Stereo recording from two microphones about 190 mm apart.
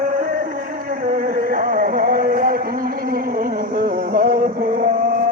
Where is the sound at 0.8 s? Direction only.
45° right (ahead or behind).